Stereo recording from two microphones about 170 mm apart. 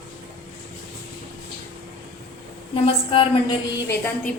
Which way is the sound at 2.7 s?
30° left (ahead or behind).